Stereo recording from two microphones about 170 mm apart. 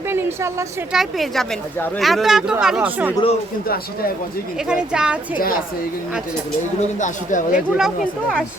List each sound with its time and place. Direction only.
0.1 s a sound: 15° right (ahead or behind)
0.9 s speech: centre (ahead or behind)
4.7 s speech: 5° right (ahead or behind)
6.7 s speech: 45° left (ahead or behind)
7.5 s speech: 5° right (ahead or behind)